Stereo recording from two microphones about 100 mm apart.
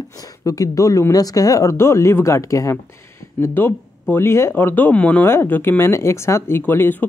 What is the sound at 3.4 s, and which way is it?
Speech, 20° left (ahead or behind).